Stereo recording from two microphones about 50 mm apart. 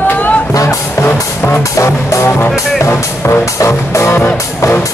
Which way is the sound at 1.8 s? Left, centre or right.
Left.